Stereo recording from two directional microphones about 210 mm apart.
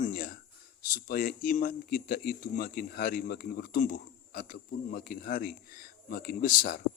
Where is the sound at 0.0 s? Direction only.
45° left (ahead or behind).